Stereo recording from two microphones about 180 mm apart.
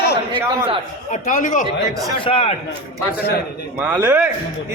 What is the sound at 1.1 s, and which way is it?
Speech, 50° left (ahead or behind).